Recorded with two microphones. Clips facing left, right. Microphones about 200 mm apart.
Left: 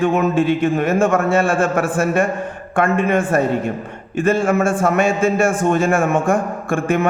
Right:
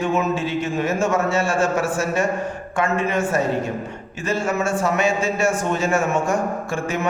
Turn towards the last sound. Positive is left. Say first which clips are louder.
# left 6 dB
turn(degrees=55)  # may be behind; listen again after turning